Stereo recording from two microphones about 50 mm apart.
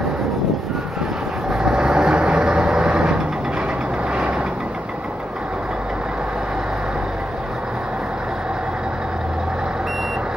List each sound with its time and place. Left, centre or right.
1.5 s vehicle: centre